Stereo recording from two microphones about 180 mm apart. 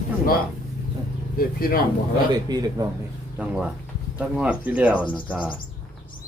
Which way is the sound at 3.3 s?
5° right (ahead or behind).